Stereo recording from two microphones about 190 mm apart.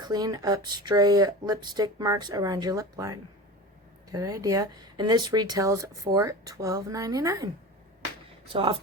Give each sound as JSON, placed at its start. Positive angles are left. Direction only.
{"t": 0.0, "sound": "speech", "side_deg": -20}
{"t": 8.4, "sound": "speech", "side_deg": -30}